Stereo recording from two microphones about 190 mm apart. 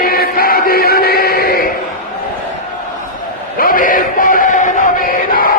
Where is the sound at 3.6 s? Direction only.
45° left (ahead or behind).